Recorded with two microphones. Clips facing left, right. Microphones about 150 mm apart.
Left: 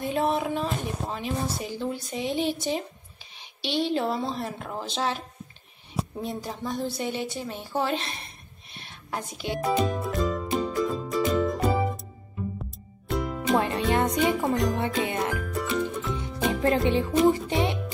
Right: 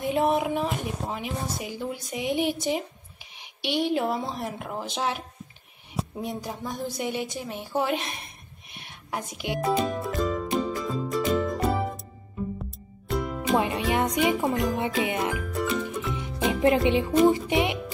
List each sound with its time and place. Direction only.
0.0 s a woman's voice: 20° right (ahead or behind)
8.6 s music: 15° right (ahead or behind)
9.6 s music: centre (ahead or behind)
13.1 s music: centre (ahead or behind)
13.6 s music: 15° right (ahead or behind)
15.5 s music: centre (ahead or behind)
16.6 s music: 20° right (ahead or behind)